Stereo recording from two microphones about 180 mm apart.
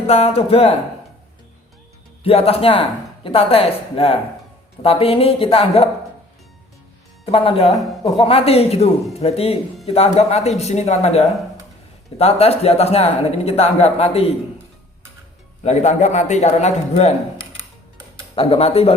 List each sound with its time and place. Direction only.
0.1 s speech: 35° left (ahead or behind)
2.2 s speech: 35° left (ahead or behind)
7.3 s speech: 30° left (ahead or behind)
15.6 s speech: 40° left (ahead or behind)
18.3 s speech: 35° left (ahead or behind)